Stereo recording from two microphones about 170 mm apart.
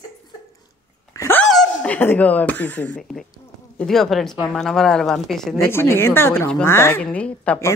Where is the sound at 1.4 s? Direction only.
5° left (ahead or behind).